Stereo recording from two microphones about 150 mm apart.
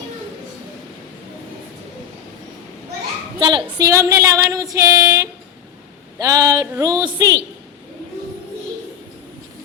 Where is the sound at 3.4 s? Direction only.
30° right (ahead or behind).